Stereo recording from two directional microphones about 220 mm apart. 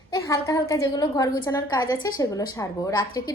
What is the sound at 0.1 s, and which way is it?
A woman's voice, 15° left (ahead or behind).